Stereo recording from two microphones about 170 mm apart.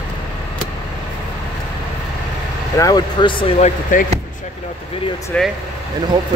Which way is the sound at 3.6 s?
55° left (ahead or behind).